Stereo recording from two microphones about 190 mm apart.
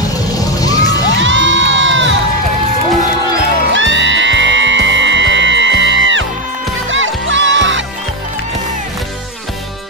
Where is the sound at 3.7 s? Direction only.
75° right (ahead or behind).